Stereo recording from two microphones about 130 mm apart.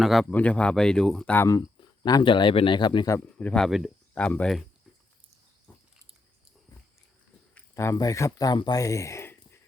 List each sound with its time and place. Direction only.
0.0 s speech: centre (ahead or behind)
0.3 s speech: 10° left (ahead or behind)
2.0 s speech: 35° left (ahead or behind)
3.3 s speech: 5° left (ahead or behind)
4.1 s speech: 10° left (ahead or behind)
7.5 s speech: 20° left (ahead or behind)